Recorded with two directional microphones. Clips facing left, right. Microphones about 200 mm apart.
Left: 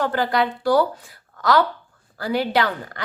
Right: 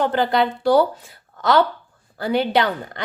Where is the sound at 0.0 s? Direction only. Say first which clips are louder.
Right 2 dB; 20° right (ahead or behind).